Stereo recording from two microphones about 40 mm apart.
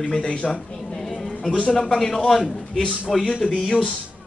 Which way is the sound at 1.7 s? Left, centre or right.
Centre.